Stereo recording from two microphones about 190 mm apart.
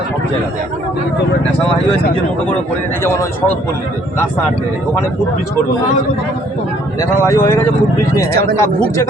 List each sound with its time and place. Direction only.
3.0 s speech: 15° left (ahead or behind)
7.2 s speech: 15° left (ahead or behind)
8.3 s speech: 55° right (ahead or behind)